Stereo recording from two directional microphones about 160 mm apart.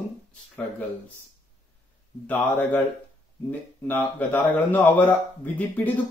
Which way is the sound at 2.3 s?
10° left (ahead or behind).